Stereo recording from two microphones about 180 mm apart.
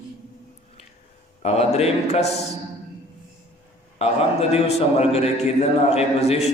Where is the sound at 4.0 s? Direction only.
35° left (ahead or behind).